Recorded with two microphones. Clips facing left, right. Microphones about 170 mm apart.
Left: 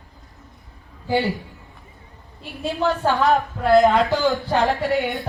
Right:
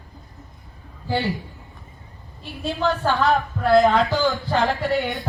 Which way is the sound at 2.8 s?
20° left (ahead or behind).